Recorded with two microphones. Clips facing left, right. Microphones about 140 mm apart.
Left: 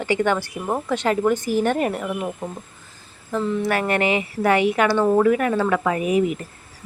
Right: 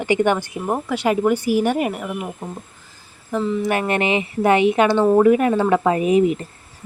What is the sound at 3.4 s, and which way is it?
Speech, centre (ahead or behind).